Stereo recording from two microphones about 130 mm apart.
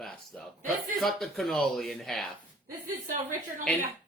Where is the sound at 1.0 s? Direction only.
Centre (ahead or behind).